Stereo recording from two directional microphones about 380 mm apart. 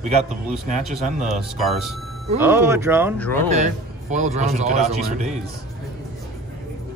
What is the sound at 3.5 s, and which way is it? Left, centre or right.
Speech, centre.